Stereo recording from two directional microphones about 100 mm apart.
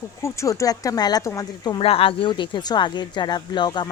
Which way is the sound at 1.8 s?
65° left (ahead or behind).